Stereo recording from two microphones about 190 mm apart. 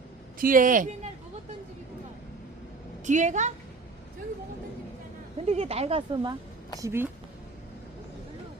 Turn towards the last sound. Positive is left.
turn(degrees=-15)  # may be behind; listen again after turning